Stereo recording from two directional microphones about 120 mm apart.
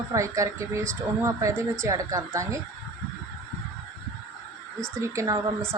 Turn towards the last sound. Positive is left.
turn(degrees=-25)  # may be behind; listen again after turning